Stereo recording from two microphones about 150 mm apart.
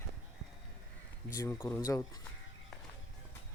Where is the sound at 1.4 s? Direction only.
20° left (ahead or behind).